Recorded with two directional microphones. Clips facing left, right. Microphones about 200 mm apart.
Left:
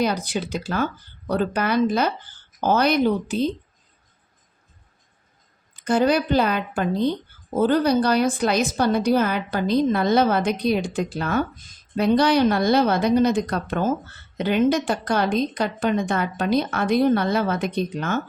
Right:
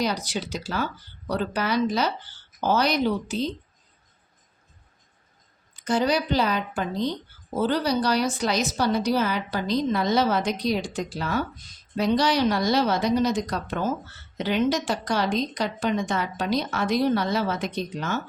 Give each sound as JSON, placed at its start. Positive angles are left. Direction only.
{"t": 0.0, "sound": "speech", "side_deg": 55}
{"t": 5.7, "sound": "speech", "side_deg": 55}